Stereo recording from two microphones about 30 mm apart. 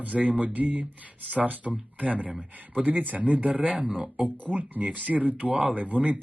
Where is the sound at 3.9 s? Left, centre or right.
Right.